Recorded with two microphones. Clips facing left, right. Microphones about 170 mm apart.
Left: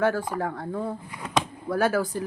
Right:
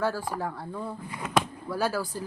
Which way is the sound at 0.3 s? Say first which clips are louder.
Left 4 dB; 55° left (ahead or behind).